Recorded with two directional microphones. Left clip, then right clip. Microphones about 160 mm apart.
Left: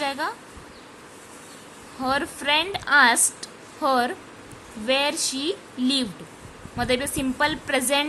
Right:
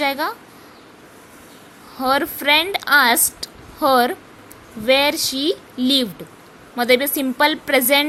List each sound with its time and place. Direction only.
0.0 s speech: 25° right (ahead or behind)
2.0 s a woman's voice: 25° right (ahead or behind)